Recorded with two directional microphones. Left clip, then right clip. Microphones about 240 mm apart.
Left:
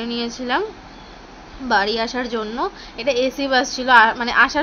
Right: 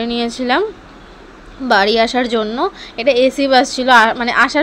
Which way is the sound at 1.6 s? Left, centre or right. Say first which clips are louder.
Right 7 dB; right.